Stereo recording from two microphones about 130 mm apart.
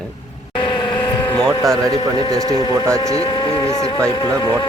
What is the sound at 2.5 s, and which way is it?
Speech, 30° left (ahead or behind).